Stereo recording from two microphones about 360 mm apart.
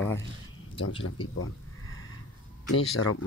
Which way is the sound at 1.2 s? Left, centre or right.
Centre.